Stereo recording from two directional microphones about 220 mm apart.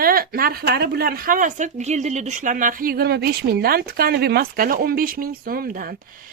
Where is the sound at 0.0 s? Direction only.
40° right (ahead or behind).